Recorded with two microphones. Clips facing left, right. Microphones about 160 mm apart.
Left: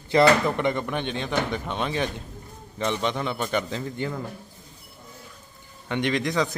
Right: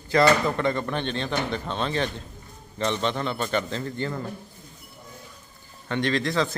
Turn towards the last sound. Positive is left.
turn(degrees=15)  # may be behind; listen again after turning